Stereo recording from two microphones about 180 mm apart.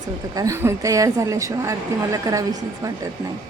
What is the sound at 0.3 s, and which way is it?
Speech, 15° right (ahead or behind).